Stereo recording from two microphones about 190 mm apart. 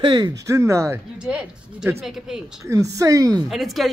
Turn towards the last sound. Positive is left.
turn(degrees=0)  # may be behind; listen again after turning